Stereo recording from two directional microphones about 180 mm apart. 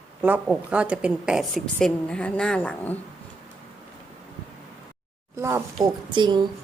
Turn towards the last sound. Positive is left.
turn(degrees=-25)  # may be behind; listen again after turning